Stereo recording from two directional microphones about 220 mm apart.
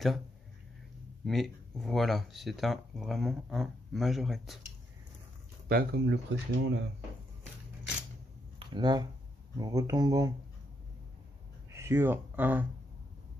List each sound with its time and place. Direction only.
1.2 s speech: centre (ahead or behind)
5.7 s speech: 45° right (ahead or behind)
8.5 s a sound: 20° right (ahead or behind)
9.6 s speech: 15° right (ahead or behind)
11.7 s speech: 10° right (ahead or behind)